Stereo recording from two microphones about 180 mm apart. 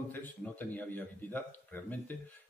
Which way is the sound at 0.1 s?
10° left (ahead or behind).